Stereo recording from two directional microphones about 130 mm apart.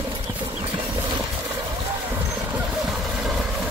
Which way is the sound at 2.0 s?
10° right (ahead or behind).